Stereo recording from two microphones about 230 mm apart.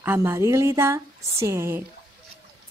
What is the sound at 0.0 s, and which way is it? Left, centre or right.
A woman's voice, centre.